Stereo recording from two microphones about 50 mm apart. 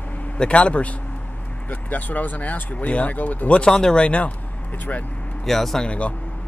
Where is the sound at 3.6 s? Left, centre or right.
Centre.